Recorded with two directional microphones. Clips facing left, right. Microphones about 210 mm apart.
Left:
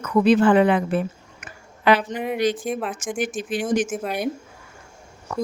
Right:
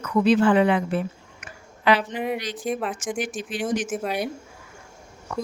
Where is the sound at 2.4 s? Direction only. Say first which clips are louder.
Left 12 dB; 50° left (ahead or behind).